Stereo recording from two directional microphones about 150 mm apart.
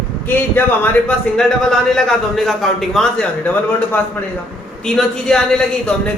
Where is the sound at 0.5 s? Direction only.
10° left (ahead or behind).